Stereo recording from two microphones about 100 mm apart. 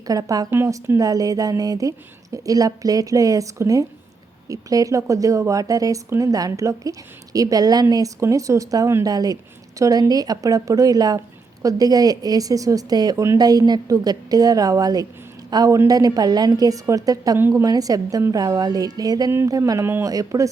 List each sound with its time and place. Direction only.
0.1 s speech: 35° right (ahead or behind)
19.8 s speech: 25° right (ahead or behind)
20.1 s speech: 35° right (ahead or behind)